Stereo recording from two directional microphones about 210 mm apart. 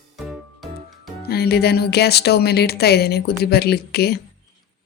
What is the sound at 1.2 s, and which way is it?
Speech, 50° left (ahead or behind).